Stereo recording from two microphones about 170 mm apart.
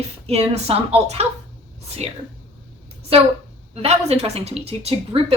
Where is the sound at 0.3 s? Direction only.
35° right (ahead or behind).